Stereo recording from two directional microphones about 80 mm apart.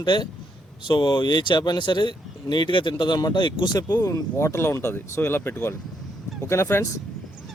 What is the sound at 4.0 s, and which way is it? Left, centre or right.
Speech, left.